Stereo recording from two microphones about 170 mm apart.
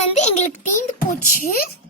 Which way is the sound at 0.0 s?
40° left (ahead or behind).